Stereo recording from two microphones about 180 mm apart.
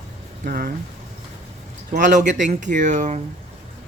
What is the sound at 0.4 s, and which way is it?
Speech, 50° right (ahead or behind).